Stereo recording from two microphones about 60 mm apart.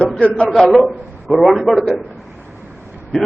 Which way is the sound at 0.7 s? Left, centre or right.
Centre.